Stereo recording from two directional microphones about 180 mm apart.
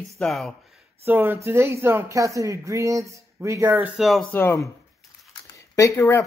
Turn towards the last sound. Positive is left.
turn(degrees=15)  # may be behind; listen again after turning